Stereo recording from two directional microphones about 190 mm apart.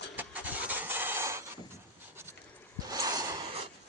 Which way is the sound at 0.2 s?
10° right (ahead or behind).